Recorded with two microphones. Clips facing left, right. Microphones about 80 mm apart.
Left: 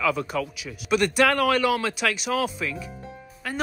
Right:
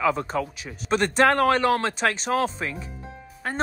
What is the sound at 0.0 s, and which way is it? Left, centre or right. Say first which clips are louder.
Speech: right 1 dB; right.